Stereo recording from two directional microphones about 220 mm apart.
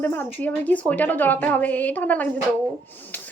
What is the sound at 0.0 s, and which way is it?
A woman's voice, 10° left (ahead or behind).